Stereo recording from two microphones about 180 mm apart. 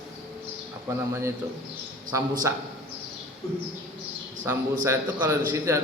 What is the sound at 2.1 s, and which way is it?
Speech, 20° right (ahead or behind).